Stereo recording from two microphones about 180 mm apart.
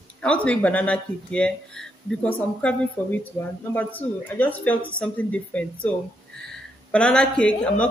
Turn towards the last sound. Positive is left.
turn(degrees=5)  # may be behind; listen again after turning